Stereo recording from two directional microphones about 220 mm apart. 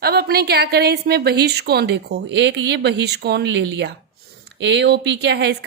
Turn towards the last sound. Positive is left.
turn(degrees=-50)  # may be behind; listen again after turning